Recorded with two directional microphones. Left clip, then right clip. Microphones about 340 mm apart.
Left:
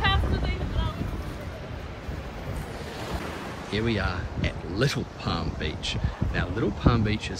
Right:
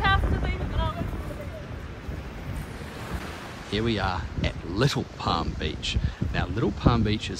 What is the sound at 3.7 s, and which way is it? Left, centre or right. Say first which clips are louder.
Speech: right 2 dB; centre.